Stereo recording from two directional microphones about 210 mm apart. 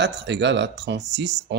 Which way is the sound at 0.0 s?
55° right (ahead or behind).